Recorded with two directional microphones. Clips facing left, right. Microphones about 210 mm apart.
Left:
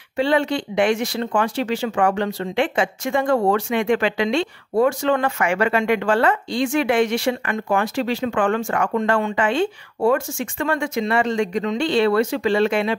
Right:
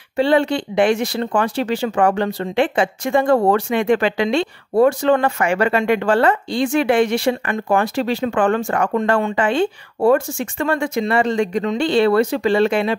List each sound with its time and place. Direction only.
0.2 s speech: 35° right (ahead or behind)